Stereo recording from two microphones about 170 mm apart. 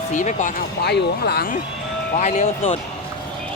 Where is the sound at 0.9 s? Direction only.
70° left (ahead or behind).